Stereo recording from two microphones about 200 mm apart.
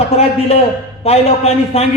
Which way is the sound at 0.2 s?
30° left (ahead or behind).